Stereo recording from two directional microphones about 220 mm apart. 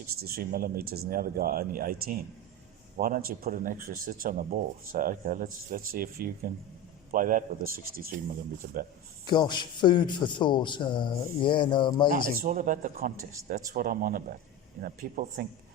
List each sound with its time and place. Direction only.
0.2 s speech: 45° right (ahead or behind)
9.2 s a man's voice: 20° left (ahead or behind)
12.1 s speech: 40° right (ahead or behind)